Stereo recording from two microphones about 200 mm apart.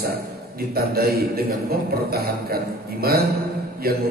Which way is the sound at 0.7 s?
50° right (ahead or behind).